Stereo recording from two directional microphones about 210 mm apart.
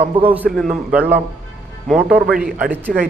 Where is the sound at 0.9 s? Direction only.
10° right (ahead or behind).